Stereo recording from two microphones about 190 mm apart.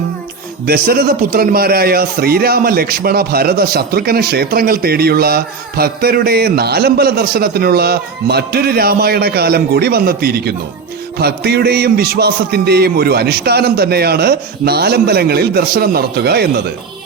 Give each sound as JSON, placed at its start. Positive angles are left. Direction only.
{"t": 0.6, "sound": "a man's voice", "side_deg": -55}